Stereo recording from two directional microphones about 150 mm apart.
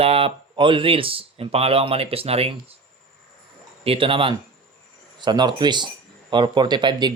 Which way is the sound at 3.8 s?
35° right (ahead or behind).